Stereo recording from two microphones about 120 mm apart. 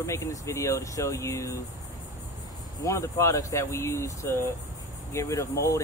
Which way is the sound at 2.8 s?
25° left (ahead or behind).